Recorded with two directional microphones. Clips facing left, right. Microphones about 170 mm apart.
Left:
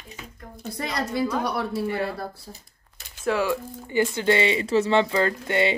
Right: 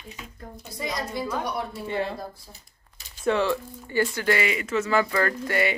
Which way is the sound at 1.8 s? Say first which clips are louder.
Left 2 dB; 25° right (ahead or behind).